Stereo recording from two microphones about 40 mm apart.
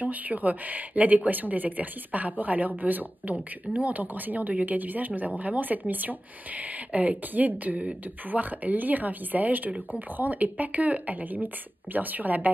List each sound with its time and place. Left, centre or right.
0.0 s speech: right